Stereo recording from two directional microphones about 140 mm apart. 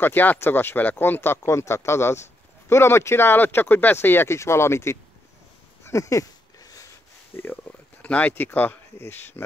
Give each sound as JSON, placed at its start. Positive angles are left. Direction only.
{"t": 0.0, "sound": "speech", "side_deg": 15}
{"t": 5.9, "sound": "a sound", "side_deg": 20}
{"t": 7.3, "sound": "speech", "side_deg": 15}